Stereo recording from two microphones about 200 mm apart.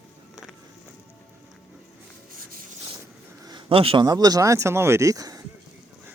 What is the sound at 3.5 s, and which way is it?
Speech, 25° right (ahead or behind).